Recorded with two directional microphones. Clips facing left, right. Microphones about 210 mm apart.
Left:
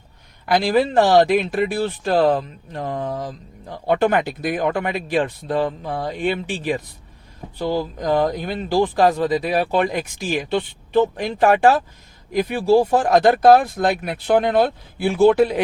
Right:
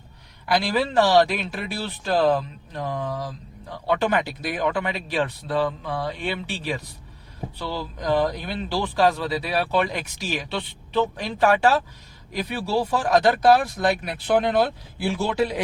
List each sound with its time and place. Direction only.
0.4 s speech: 50° left (ahead or behind)